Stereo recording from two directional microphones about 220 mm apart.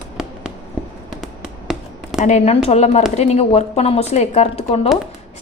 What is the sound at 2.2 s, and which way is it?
Speech, 30° left (ahead or behind).